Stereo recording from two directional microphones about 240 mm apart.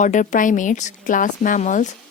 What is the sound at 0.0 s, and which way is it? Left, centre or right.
Speech, left.